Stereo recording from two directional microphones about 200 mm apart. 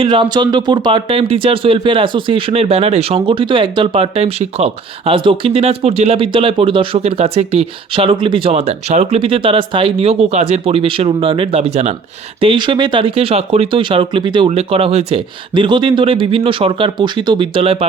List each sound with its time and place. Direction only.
0.0 s speech: 25° right (ahead or behind)